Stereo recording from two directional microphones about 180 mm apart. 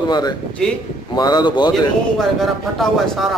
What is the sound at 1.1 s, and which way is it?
Speech, 25° left (ahead or behind).